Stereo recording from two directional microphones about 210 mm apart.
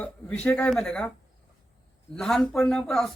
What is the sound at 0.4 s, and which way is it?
Speech, 5° left (ahead or behind).